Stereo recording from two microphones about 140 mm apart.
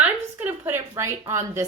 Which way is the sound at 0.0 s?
15° right (ahead or behind).